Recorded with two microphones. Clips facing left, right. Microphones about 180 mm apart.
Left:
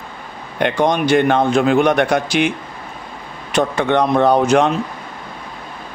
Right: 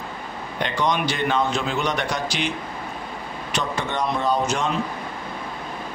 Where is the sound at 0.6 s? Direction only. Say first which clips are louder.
Left 7 dB; 50° left (ahead or behind).